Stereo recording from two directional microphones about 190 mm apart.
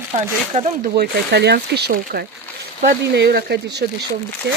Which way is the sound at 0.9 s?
60° right (ahead or behind).